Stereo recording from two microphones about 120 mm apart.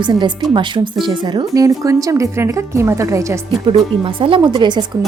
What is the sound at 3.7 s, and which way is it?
A woman's voice, 50° right (ahead or behind).